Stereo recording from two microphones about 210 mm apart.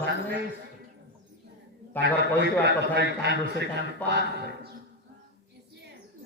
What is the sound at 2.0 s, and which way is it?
A man's voice, 55° right (ahead or behind).